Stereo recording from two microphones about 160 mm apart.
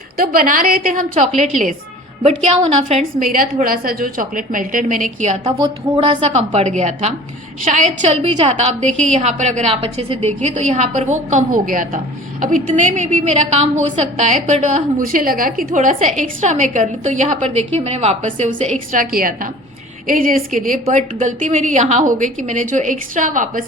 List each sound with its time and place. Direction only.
0.2 s a woman's voice: 65° right (ahead or behind)
2.2 s a woman's voice: 40° right (ahead or behind)
3.2 s a woman's voice: 60° right (ahead or behind)
5.5 s speech: 25° right (ahead or behind)
6.0 s a woman's voice: 35° right (ahead or behind)
8.0 s a woman's voice: 40° right (ahead or behind)
8.9 s a woman's voice: 5° left (ahead or behind)
9.1 s a woman's voice: 45° right (ahead or behind)